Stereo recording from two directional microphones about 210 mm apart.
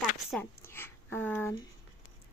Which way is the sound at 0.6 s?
10° left (ahead or behind).